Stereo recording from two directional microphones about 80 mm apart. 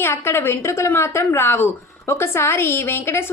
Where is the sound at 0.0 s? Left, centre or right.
Left.